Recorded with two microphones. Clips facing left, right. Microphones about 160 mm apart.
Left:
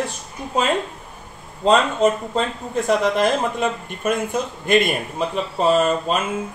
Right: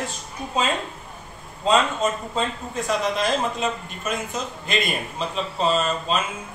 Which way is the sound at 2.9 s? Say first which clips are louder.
Left 5 dB; 60° left (ahead or behind).